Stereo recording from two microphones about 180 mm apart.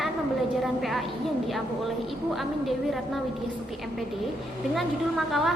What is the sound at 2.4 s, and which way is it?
Speech, centre (ahead or behind).